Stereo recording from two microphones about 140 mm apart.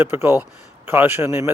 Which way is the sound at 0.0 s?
15° right (ahead or behind).